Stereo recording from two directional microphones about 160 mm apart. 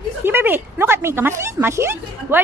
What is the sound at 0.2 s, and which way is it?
Speech, 15° right (ahead or behind).